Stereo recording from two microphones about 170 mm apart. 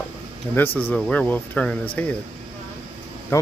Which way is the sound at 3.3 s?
15° left (ahead or behind).